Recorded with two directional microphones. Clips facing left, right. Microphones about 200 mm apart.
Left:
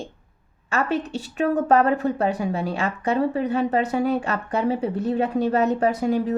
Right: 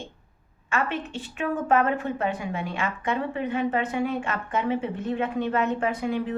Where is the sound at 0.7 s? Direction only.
40° left (ahead or behind).